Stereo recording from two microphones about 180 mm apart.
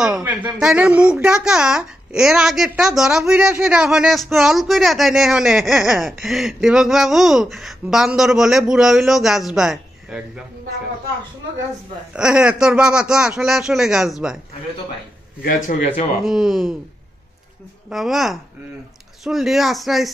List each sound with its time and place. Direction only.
0.0 s speech: 5° right (ahead or behind)
12.1 s speech: 5° right (ahead or behind)
15.4 s a man's voice: 45° left (ahead or behind)
16.2 s speech: centre (ahead or behind)
17.8 s speech: centre (ahead or behind)